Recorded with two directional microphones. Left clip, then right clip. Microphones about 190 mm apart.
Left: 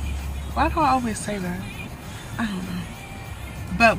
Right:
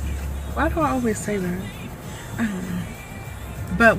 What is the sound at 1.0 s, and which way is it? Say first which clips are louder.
Speech: right 5 dB; 5° right (ahead or behind).